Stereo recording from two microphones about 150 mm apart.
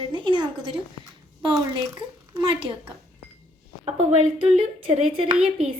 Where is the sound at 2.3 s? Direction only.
35° right (ahead or behind).